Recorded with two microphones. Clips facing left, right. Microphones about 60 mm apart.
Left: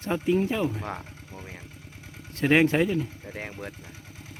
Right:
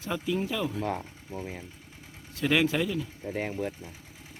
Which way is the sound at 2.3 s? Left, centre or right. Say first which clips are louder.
Left 4 dB; left.